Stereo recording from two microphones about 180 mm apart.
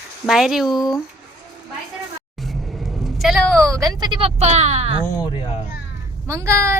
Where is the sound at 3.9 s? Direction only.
25° right (ahead or behind).